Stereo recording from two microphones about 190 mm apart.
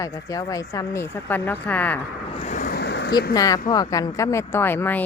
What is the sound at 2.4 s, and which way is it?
Vehicle, 45° left (ahead or behind).